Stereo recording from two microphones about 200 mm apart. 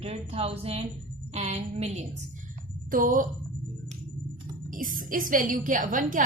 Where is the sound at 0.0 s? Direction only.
30° right (ahead or behind).